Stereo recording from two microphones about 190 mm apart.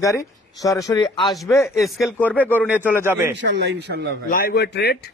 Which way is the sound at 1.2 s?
Centre (ahead or behind).